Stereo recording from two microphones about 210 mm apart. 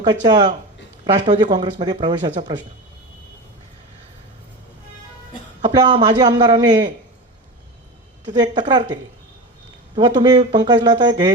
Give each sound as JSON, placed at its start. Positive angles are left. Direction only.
{"t": 0.3, "sound": "speech", "side_deg": -20}
{"t": 5.6, "sound": "speech", "side_deg": -20}
{"t": 8.3, "sound": "speech", "side_deg": -20}
{"t": 10.0, "sound": "speech", "side_deg": -20}